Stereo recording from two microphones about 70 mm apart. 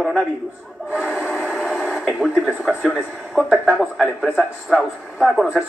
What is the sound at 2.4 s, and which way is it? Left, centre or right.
A man's voice, centre.